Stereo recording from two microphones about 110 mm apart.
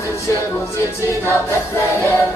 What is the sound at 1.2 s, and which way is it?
Choir, 20° left (ahead or behind).